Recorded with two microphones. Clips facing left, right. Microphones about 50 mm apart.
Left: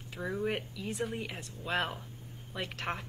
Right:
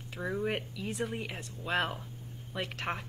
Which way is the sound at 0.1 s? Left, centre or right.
Centre.